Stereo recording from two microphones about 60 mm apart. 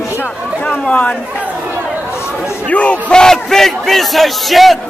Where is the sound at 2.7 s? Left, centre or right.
Left.